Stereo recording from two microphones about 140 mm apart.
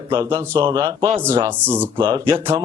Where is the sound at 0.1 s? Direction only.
35° right (ahead or behind).